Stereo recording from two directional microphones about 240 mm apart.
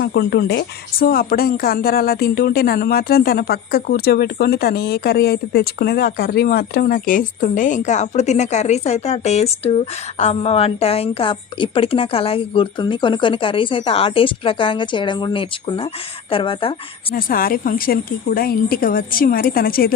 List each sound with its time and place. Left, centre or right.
0.0 s a woman's voice: left
17.1 s a woman's voice: left